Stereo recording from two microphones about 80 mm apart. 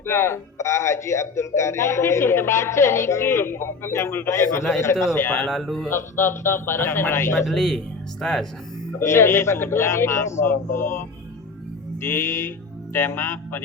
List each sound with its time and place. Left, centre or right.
0.0 s a man's voice: left
5.5 s speech: centre
5.9 s speech: left
7.4 s speech: centre
9.0 s speech: left